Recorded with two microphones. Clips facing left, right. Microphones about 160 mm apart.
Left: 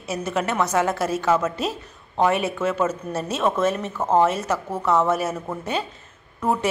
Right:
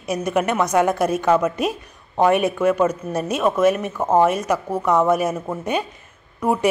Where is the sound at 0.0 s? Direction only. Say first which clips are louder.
Right 4 dB; 15° right (ahead or behind).